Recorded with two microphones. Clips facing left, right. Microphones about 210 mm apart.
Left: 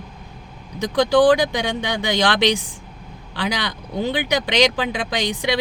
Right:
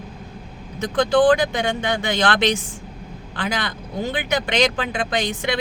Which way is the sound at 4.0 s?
15° left (ahead or behind).